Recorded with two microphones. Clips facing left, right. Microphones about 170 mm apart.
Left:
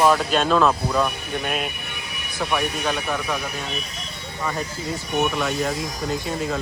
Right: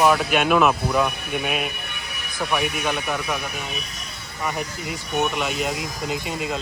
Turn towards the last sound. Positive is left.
turn(degrees=-15)  # may be behind; listen again after turning